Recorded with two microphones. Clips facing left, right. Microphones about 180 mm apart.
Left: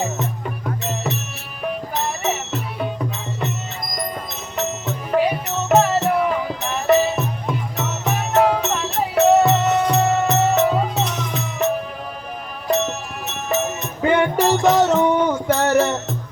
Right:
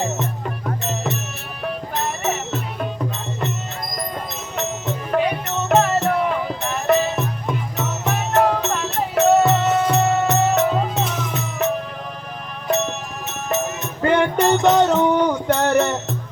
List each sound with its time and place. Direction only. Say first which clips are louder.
0.0 s music: even; centre (ahead or behind)
4.5 s music: left 1 dB; 5° left (ahead or behind)